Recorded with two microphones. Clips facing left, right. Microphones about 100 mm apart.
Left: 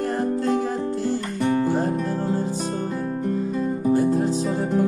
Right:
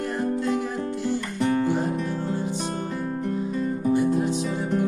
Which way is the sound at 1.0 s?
35° left (ahead or behind).